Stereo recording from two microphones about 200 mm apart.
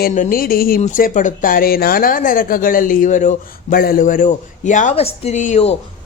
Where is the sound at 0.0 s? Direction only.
40° left (ahead or behind).